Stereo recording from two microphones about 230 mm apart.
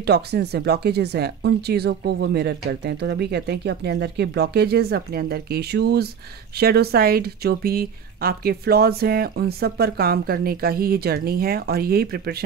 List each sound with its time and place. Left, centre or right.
0.0 s speech: right